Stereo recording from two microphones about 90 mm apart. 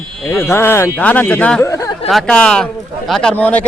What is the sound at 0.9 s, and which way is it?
Speech, 15° left (ahead or behind).